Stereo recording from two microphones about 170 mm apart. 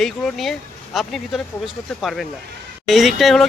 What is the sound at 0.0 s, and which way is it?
Speech, centre (ahead or behind).